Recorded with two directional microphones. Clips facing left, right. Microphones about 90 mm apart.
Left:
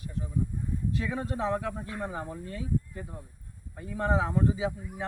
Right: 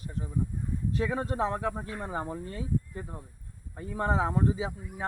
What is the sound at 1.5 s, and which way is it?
Speech, 20° right (ahead or behind).